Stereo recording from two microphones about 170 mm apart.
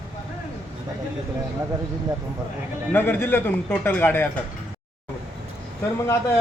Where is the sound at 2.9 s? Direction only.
10° left (ahead or behind).